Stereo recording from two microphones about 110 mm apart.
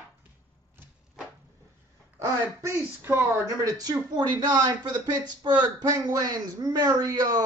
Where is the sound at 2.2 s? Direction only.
25° right (ahead or behind).